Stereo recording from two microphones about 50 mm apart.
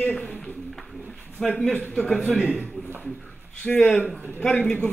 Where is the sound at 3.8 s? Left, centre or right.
Left.